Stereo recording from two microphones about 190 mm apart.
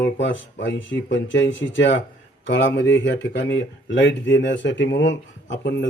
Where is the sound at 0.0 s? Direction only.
70° left (ahead or behind).